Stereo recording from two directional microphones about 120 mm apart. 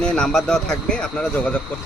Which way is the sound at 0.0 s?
5° left (ahead or behind).